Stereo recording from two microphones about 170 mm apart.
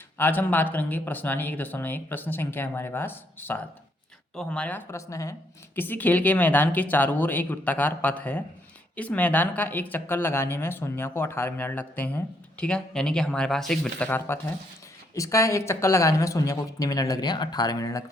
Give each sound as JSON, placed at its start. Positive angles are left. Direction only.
{"t": 0.2, "sound": "speech", "side_deg": 10}